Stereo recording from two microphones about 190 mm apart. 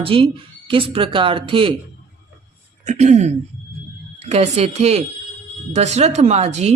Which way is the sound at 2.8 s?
35° right (ahead or behind).